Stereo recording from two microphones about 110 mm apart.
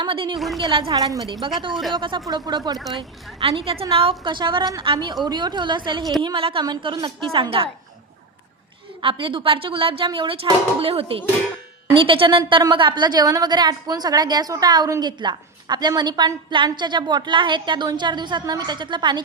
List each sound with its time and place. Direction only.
0.0 s a woman's voice: 50° right (ahead or behind)
0.3 s speech: centre (ahead or behind)
0.6 s a woman's voice: 50° right (ahead or behind)
0.9 s a woman's voice: 40° right (ahead or behind)
1.7 s speech: centre (ahead or behind)
2.0 s a woman's voice: 50° right (ahead or behind)
2.2 s a woman's voice: 35° right (ahead or behind)
2.9 s a woman's voice: 50° right (ahead or behind)
4.2 s a woman's voice: 45° right (ahead or behind)
6.2 s a woman's voice: 55° right (ahead or behind)
9.0 s a woman's voice: 50° right (ahead or behind)